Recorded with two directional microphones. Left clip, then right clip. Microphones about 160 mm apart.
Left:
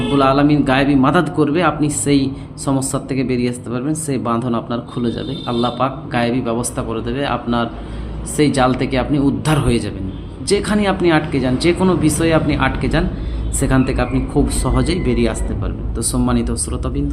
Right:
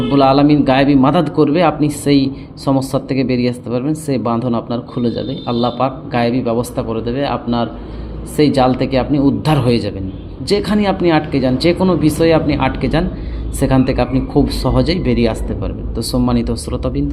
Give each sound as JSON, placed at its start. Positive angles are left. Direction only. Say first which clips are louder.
{"t": 0.1, "sound": "a man's voice", "louder": "right 3 dB", "side_deg": -25}